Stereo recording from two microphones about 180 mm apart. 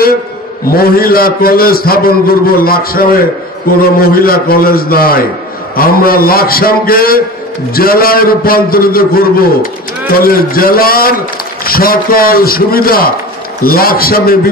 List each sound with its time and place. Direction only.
0.7 s a man's voice: 55° left (ahead or behind)